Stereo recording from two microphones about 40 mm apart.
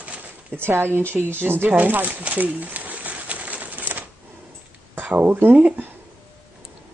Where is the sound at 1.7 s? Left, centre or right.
Right.